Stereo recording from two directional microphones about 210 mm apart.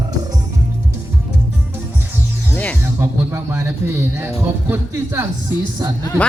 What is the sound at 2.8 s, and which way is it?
Speech, 10° right (ahead or behind).